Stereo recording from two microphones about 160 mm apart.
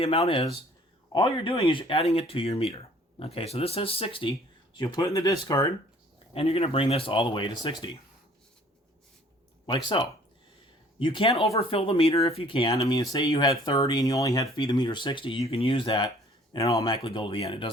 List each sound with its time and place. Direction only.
0.0 s speech: 35° left (ahead or behind)
6.3 s speech: 35° left (ahead or behind)
9.6 s speech: 30° left (ahead or behind)
13.0 s speech: 25° left (ahead or behind)
17.0 s speech: 35° left (ahead or behind)